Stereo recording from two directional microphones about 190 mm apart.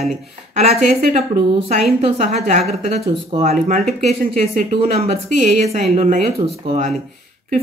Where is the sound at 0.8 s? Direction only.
35° right (ahead or behind).